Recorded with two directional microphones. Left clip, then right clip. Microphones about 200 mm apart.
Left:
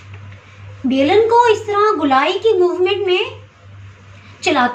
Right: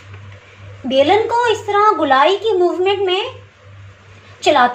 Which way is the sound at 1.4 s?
30° right (ahead or behind).